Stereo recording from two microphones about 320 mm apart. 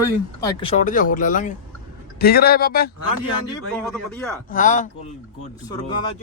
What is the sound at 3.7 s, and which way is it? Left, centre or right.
Speech, centre.